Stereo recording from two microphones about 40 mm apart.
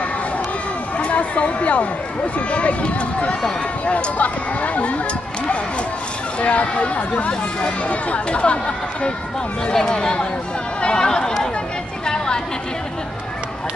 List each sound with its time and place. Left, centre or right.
0.9 s chatter: left
2.3 s speech: left
6.4 s speech: left
9.7 s speech: centre